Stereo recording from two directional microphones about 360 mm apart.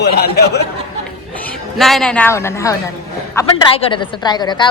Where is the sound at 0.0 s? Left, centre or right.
Left.